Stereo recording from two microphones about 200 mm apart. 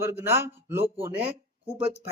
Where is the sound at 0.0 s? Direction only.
10° right (ahead or behind).